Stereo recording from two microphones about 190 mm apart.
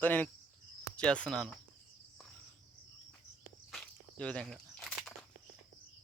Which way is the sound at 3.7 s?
5° left (ahead or behind).